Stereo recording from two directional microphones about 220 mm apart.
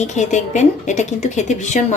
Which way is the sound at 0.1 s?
35° left (ahead or behind).